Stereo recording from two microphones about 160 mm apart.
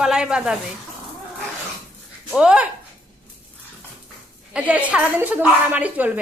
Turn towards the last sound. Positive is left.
turn(degrees=-10)  # may be behind; listen again after turning